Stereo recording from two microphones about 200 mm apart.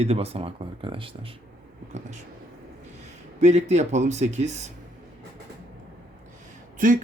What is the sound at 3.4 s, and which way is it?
Speech, 35° right (ahead or behind).